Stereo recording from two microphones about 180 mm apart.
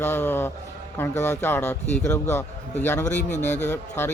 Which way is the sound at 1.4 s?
10° left (ahead or behind).